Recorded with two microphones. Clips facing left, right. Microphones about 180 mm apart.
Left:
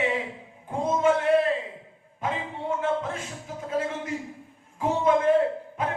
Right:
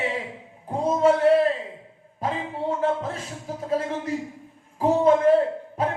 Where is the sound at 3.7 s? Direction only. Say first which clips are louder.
Right 3 dB; 35° right (ahead or behind).